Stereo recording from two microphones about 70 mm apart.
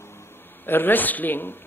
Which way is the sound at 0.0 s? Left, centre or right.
Left.